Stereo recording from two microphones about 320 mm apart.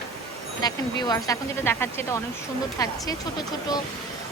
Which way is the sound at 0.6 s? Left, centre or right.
Centre.